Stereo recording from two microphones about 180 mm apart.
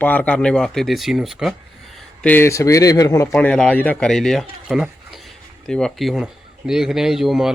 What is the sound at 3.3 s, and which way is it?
Speech, 5° left (ahead or behind).